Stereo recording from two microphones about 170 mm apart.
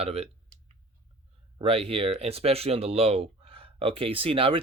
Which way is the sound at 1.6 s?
30° right (ahead or behind).